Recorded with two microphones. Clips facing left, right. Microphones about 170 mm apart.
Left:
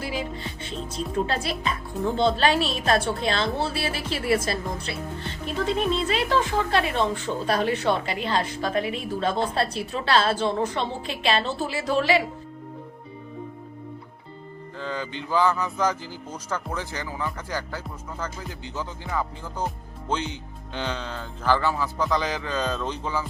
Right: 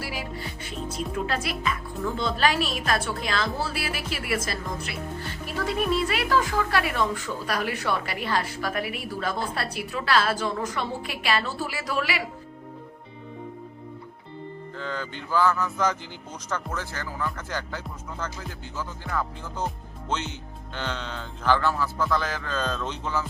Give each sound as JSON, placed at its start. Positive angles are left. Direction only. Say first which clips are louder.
{"t": 0.0, "sound": "music", "louder": "left 3 dB", "side_deg": 20}
{"t": 1.1, "sound": "a woman's voice", "louder": "left 4 dB", "side_deg": 30}
{"t": 14.8, "sound": "a man's voice", "louder": "left 3 dB", "side_deg": 10}
{"t": 19.0, "sound": "music", "louder": "even", "side_deg": 10}
{"t": 20.7, "sound": "a man's voice", "louder": "left 2 dB", "side_deg": 10}